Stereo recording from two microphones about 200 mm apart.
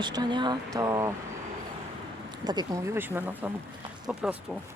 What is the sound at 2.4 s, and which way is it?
Speech, 20° right (ahead or behind).